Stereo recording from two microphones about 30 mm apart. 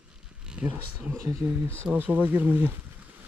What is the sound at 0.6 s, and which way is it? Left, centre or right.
Speech, right.